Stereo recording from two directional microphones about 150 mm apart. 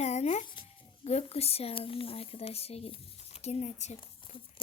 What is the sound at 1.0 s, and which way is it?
Speech, 45° left (ahead or behind).